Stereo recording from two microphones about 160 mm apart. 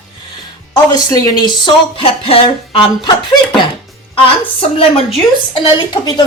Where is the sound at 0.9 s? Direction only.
25° left (ahead or behind).